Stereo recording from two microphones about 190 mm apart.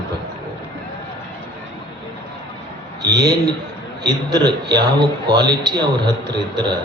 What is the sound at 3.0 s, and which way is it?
A man's voice, 20° right (ahead or behind).